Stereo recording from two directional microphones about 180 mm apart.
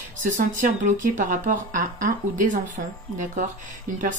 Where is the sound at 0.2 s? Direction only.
45° right (ahead or behind).